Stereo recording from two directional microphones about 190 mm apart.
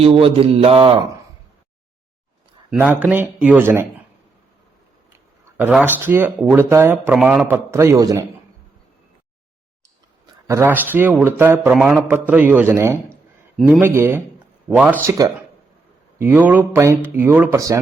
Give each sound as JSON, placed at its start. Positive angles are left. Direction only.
{"t": 0.0, "sound": "a sound", "side_deg": -30}
{"t": 2.6, "sound": "speech", "side_deg": -10}
{"t": 5.5, "sound": "speech", "side_deg": -10}
{"t": 10.4, "sound": "a man's voice", "side_deg": -15}
{"t": 13.6, "sound": "speech", "side_deg": 0}
{"t": 13.8, "sound": "speech", "side_deg": -15}